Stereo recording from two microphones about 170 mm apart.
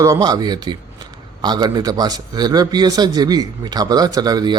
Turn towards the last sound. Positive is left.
turn(degrees=-25)  # may be behind; listen again after turning